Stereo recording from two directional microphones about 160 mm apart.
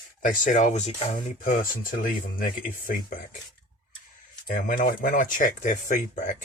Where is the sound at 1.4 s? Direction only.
60° left (ahead or behind).